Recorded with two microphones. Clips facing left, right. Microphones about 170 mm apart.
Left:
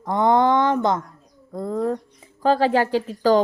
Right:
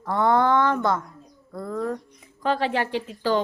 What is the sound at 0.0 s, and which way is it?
A woman's voice, 20° left (ahead or behind).